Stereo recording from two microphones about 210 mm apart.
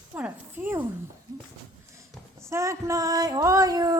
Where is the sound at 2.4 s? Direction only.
15° right (ahead or behind).